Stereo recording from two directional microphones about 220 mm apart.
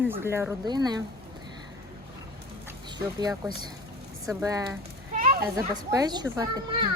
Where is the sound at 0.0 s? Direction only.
10° right (ahead or behind).